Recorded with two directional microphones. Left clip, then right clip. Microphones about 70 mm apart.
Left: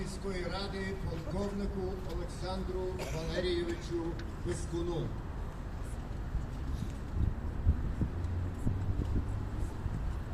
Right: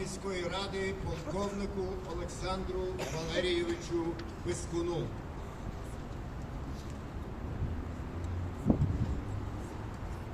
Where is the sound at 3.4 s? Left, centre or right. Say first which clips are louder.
Right 2 dB; left.